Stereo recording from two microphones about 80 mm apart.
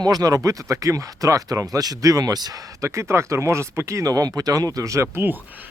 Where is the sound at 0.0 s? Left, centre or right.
Right.